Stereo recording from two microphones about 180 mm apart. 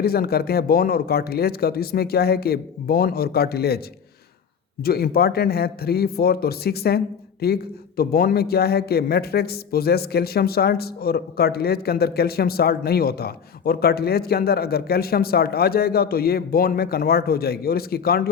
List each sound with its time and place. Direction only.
0.0 s a man's voice: 60° left (ahead or behind)
4.8 s a man's voice: 60° left (ahead or behind)